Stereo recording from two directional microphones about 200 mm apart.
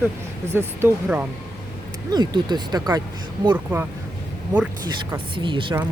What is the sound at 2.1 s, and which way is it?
Speech, 20° right (ahead or behind).